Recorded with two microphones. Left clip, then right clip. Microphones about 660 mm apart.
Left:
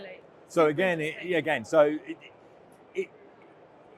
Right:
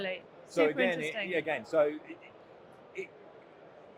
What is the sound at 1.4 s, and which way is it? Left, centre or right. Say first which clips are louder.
Speech: left 7 dB; left.